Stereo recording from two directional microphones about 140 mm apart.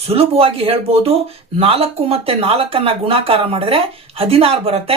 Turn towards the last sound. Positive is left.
turn(degrees=-45)  # may be behind; listen again after turning